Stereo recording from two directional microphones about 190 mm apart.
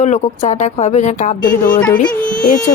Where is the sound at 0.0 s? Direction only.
35° left (ahead or behind).